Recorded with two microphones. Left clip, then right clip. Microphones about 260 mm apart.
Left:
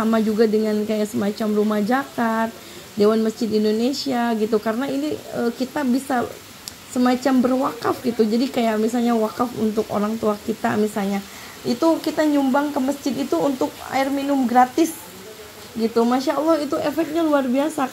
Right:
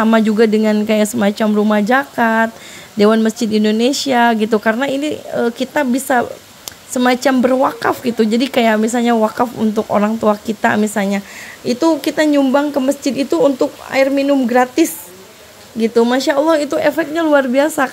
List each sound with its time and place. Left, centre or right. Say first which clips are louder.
0.0 s speech: right 6 dB; right